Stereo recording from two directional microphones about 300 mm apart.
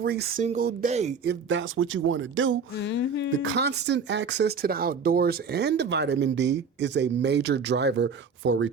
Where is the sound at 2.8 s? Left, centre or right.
Left.